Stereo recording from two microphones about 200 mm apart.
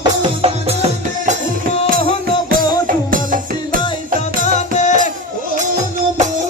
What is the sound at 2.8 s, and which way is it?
Music, 40° right (ahead or behind).